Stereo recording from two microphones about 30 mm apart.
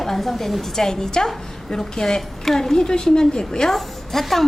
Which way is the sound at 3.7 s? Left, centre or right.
Centre.